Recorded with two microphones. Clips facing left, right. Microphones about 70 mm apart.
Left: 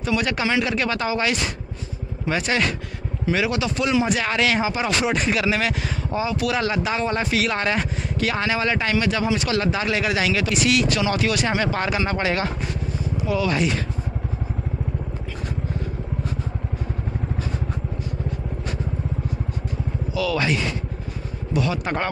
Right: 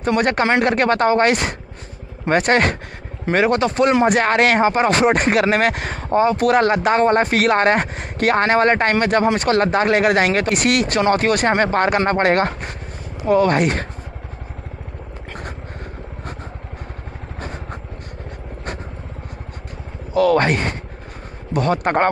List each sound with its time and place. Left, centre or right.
0.0 s speech: right
20.2 s speech: right